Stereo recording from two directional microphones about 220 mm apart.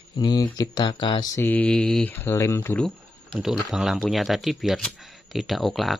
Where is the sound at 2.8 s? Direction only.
Centre (ahead or behind).